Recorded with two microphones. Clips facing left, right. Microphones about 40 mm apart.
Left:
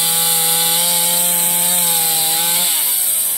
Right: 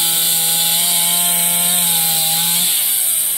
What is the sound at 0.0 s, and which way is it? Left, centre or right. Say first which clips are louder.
Sawing: left 1 dB; centre.